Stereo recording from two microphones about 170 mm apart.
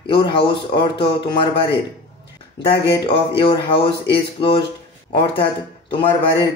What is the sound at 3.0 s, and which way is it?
Speech, 30° left (ahead or behind).